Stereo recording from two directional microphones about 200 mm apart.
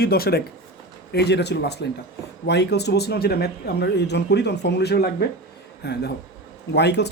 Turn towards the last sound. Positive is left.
turn(degrees=60)  # may be behind; listen again after turning